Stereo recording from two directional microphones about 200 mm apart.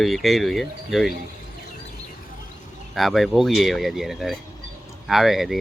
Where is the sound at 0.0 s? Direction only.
Centre (ahead or behind).